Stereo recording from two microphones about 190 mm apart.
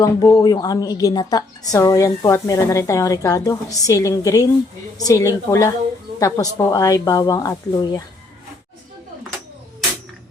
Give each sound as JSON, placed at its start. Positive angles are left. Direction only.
{"t": 0.0, "sound": "a woman's voice", "side_deg": 20}